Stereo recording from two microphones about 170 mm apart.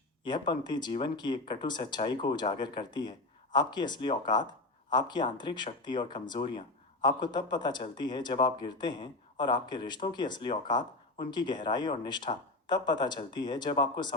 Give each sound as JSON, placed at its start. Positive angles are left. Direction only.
{"t": 0.3, "sound": "speech", "side_deg": 25}